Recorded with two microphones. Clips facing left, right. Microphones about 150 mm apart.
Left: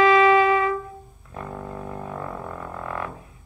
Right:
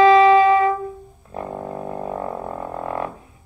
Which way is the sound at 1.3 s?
30° right (ahead or behind).